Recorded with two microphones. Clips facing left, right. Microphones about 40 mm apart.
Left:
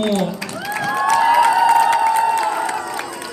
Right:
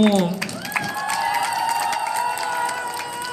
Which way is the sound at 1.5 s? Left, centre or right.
Left.